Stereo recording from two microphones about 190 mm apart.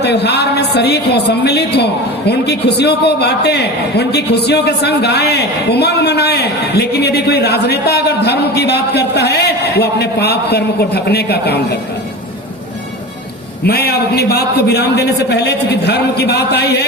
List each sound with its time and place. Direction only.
0.0 s a woman's voice: 60° left (ahead or behind)
13.7 s a woman's voice: 55° left (ahead or behind)